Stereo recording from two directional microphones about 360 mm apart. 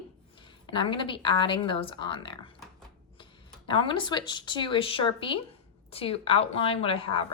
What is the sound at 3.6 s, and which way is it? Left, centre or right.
A woman's voice, centre.